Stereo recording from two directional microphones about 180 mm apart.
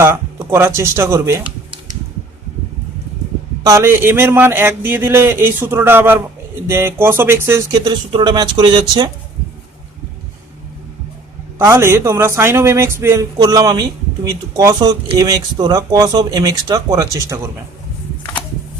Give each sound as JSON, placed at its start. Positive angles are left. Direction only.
{"t": 0.0, "sound": "speech", "side_deg": -15}
{"t": 3.7, "sound": "speech", "side_deg": -15}
{"t": 7.9, "sound": "speech", "side_deg": -25}
{"t": 11.5, "sound": "speech", "side_deg": -15}